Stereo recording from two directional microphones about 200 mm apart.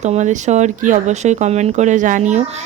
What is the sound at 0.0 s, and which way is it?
Speech, 35° right (ahead or behind).